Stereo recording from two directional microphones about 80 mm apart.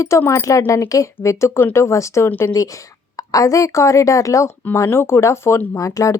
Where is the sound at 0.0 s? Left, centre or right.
Left.